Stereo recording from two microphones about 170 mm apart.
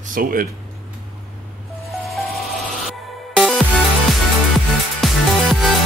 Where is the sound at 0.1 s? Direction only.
55° right (ahead or behind).